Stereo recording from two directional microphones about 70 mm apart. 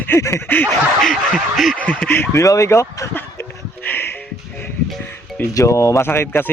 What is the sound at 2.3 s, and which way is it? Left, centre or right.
Speech, left.